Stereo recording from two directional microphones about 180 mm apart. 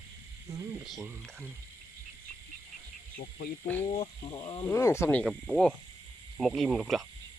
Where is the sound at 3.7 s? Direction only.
10° left (ahead or behind).